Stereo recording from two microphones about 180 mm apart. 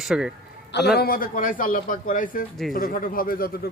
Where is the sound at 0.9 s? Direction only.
55° left (ahead or behind).